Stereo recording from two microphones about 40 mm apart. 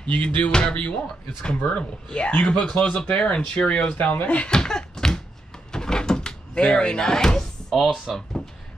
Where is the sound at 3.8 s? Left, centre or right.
Left.